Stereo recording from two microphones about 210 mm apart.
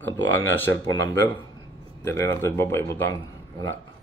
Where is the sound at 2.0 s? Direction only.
10° left (ahead or behind).